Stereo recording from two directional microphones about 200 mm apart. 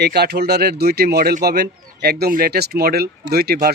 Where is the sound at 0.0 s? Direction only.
55° right (ahead or behind).